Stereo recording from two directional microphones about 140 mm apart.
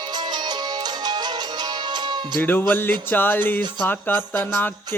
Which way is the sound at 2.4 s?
15° left (ahead or behind).